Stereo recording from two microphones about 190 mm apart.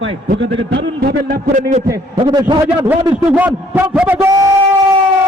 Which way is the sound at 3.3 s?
10° right (ahead or behind).